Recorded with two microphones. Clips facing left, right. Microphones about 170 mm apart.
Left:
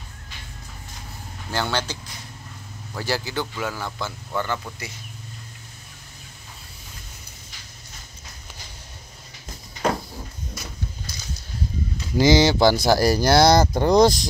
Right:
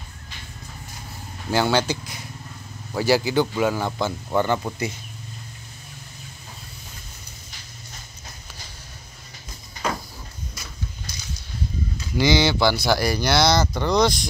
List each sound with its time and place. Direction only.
1.5 s speech: 10° right (ahead or behind)
12.2 s speech: 40° left (ahead or behind)